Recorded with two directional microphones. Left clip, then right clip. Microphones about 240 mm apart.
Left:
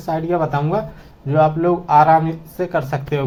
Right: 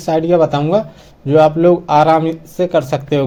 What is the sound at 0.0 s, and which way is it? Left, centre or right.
Speech, right.